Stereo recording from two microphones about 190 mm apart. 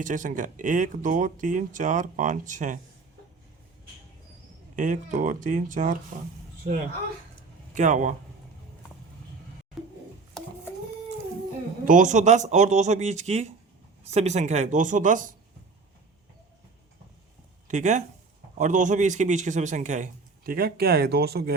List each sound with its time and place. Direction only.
0.0 s speech: 45° right (ahead or behind)
4.8 s a man's voice: 40° right (ahead or behind)
9.8 s a sound: centre (ahead or behind)
11.9 s a man's voice: 40° right (ahead or behind)
17.7 s a man's voice: 40° right (ahead or behind); by 21.5 s 55° right (ahead or behind)